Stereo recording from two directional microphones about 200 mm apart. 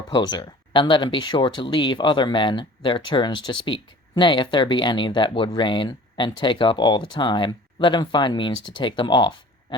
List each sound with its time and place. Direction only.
0.1 s speech: 20° left (ahead or behind)